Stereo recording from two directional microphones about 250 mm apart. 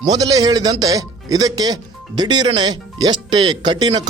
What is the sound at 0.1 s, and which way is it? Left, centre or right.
A man's voice, centre.